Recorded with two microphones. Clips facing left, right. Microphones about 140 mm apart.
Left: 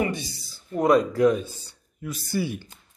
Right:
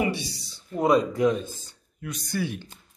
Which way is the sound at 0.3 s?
Centre (ahead or behind).